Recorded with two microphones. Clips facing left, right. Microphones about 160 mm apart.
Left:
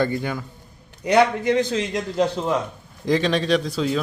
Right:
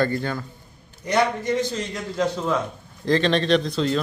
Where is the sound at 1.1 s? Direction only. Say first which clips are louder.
Left 4 dB; 65° left (ahead or behind).